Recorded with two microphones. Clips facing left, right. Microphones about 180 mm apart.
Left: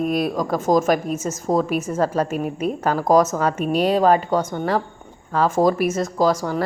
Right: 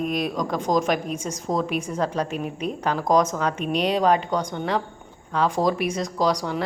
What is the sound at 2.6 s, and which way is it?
A woman's voice, 5° left (ahead or behind).